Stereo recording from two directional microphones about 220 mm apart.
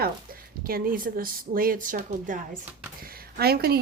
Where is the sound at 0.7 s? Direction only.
40° right (ahead or behind).